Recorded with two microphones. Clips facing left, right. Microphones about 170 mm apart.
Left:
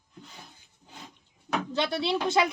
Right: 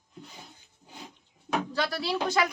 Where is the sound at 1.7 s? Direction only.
25° left (ahead or behind).